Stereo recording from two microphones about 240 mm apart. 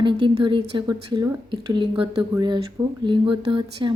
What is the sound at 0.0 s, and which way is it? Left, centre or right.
A woman's voice, centre.